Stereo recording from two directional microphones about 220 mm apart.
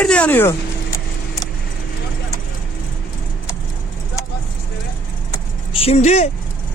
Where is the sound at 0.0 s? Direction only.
5° left (ahead or behind).